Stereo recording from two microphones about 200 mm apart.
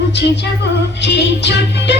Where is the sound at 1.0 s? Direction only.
60° left (ahead or behind).